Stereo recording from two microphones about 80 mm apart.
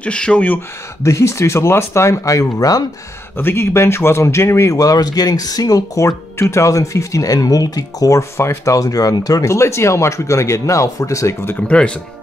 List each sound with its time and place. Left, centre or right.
0.0 s speech: centre
1.0 s speech: left
3.3 s speech: left
11.6 s speech: centre